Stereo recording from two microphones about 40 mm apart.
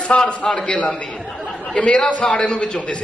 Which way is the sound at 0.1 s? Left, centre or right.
Left.